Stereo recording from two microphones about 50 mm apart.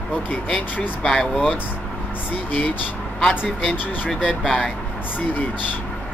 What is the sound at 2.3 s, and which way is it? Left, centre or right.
Speech, left.